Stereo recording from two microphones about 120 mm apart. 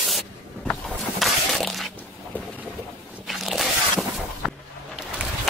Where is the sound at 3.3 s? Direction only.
Centre (ahead or behind).